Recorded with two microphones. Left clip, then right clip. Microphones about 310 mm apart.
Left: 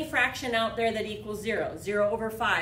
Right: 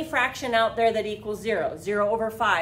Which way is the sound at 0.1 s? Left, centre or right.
Centre.